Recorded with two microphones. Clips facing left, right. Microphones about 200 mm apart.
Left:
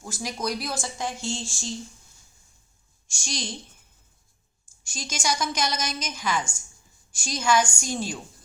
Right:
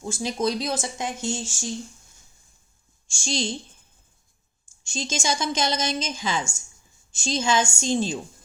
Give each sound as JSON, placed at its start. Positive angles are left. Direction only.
{"t": 0.0, "sound": "a woman's voice", "side_deg": -25}
{"t": 3.1, "sound": "a woman's voice", "side_deg": -25}
{"t": 4.8, "sound": "a woman's voice", "side_deg": -25}